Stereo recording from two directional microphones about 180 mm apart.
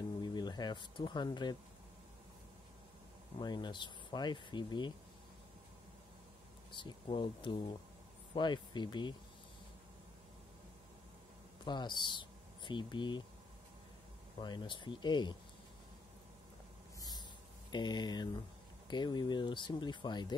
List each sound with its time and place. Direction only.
0.2 s speech: 25° left (ahead or behind)
3.3 s speech: 25° left (ahead or behind)
6.7 s speech: 25° left (ahead or behind)
11.6 s speech: 25° left (ahead or behind)
14.4 s speech: 25° left (ahead or behind)
17.6 s speech: 25° left (ahead or behind)